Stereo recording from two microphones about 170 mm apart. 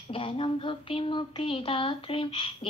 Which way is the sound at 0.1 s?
30° left (ahead or behind).